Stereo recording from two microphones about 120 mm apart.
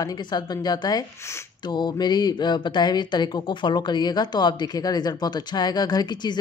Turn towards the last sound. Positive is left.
turn(degrees=35)  # may be behind; listen again after turning